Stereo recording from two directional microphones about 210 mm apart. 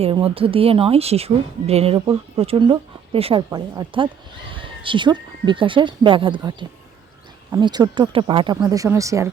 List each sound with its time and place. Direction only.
0.0 s speech: 25° right (ahead or behind)